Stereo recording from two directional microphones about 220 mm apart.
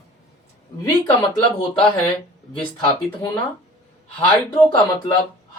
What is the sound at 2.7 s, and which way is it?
Speech, 20° left (ahead or behind).